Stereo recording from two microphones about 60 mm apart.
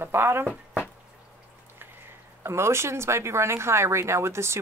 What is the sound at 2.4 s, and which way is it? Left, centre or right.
Speech, right.